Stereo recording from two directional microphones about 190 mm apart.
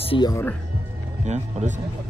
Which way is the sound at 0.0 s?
30° left (ahead or behind).